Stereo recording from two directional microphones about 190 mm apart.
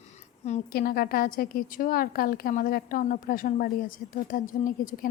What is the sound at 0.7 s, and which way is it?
A woman's voice, 50° left (ahead or behind).